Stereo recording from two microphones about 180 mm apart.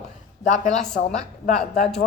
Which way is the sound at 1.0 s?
60° left (ahead or behind).